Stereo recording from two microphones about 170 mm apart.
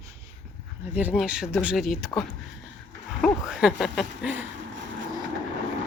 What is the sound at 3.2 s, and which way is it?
Speech, centre (ahead or behind).